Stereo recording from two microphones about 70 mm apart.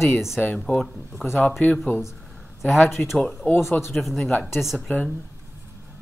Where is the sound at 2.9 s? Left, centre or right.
Centre.